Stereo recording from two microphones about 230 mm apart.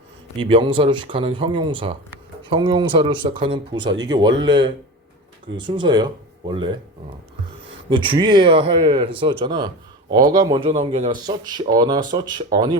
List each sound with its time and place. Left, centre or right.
0.3 s speech: right
7.9 s speech: right